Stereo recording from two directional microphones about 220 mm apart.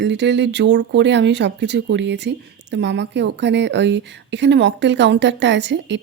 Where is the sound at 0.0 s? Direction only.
50° right (ahead or behind).